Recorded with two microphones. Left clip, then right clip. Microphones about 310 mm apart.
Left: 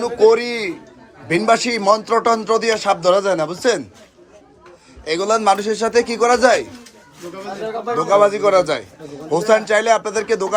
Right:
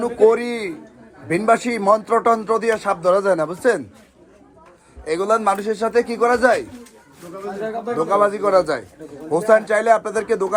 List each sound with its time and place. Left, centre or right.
0.0 s speech: centre
5.1 s a man's voice: centre
7.9 s speech: centre